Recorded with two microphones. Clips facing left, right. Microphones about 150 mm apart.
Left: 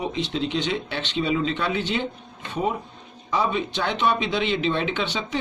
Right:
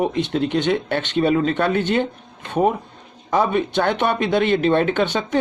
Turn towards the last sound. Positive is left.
turn(degrees=-50)  # may be behind; listen again after turning